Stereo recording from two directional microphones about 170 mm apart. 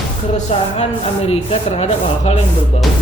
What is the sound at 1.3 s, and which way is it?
Speech, 35° left (ahead or behind).